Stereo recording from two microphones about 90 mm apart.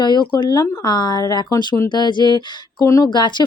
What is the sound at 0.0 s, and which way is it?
Speech, 55° left (ahead or behind).